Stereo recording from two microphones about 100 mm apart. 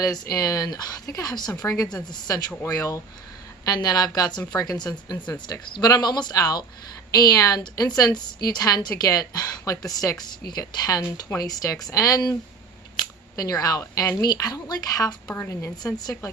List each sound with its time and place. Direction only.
0.0 s a woman's voice: 40° left (ahead or behind)
15.8 s a woman's voice: 40° left (ahead or behind)